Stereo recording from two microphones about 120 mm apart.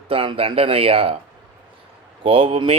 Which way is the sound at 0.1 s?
50° right (ahead or behind).